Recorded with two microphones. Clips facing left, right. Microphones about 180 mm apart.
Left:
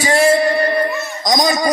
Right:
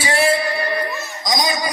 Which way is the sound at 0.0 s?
45° left (ahead or behind).